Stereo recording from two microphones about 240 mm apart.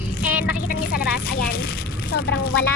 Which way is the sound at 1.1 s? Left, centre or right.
Left.